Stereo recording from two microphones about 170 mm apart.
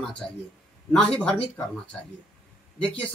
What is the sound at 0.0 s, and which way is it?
Speech, 5° left (ahead or behind).